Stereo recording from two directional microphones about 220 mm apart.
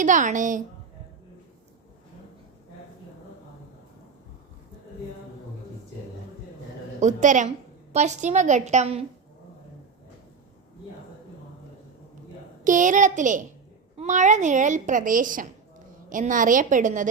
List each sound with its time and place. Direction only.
0.0 s a woman's voice: 35° right (ahead or behind)
7.0 s a woman's voice: 35° right (ahead or behind)
12.6 s a woman's voice: 35° right (ahead or behind)